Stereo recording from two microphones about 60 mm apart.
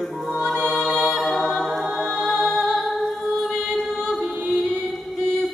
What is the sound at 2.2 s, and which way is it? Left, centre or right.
Music, centre.